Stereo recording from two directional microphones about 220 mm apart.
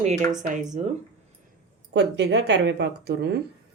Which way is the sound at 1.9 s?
50° right (ahead or behind).